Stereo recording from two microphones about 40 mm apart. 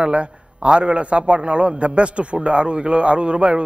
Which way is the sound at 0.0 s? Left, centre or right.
Right.